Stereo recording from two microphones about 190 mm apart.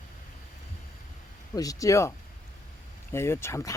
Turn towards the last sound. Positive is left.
turn(degrees=15)  # may be behind; listen again after turning